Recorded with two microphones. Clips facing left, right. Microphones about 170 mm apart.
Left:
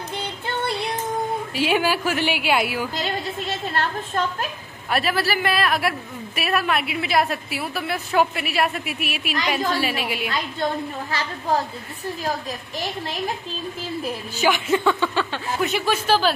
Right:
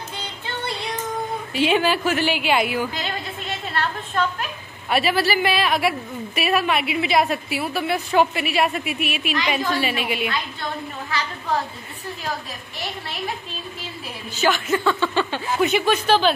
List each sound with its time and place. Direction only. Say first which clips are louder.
1.5 s a woman's voice: right 3 dB; 5° left (ahead or behind)
3.7 s a sound: right 1 dB; 40° left (ahead or behind)
4.8 s a woman's voice: right 2 dB; centre (ahead or behind)
14.3 s a woman's voice: even; 15° left (ahead or behind)
15.1 s a woman's voice: right 3 dB; centre (ahead or behind)